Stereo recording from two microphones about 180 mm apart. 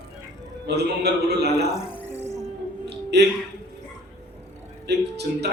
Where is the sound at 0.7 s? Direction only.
65° right (ahead or behind).